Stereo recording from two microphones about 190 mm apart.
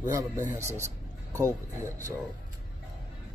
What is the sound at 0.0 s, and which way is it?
A man's voice, 15° right (ahead or behind).